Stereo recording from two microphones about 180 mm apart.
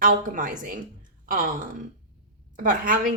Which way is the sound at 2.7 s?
50° right (ahead or behind).